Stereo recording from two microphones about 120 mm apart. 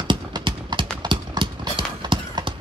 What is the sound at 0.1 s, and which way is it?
Clip-clop, 40° right (ahead or behind).